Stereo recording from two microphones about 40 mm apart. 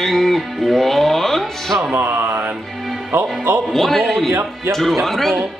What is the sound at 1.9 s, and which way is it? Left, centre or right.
Music, right.